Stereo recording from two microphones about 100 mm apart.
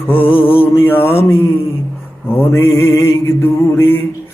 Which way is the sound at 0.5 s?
20° left (ahead or behind).